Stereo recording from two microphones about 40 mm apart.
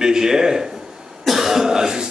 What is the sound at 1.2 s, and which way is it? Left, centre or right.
Cough, centre.